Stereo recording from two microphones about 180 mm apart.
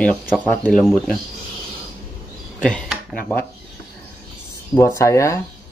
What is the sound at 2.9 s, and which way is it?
Speech, 5° left (ahead or behind).